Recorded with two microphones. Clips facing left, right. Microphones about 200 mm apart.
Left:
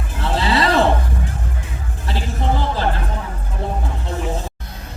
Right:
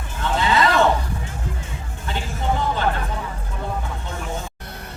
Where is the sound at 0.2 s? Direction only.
35° left (ahead or behind).